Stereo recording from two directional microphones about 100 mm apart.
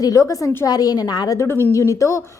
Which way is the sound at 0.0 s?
35° left (ahead or behind).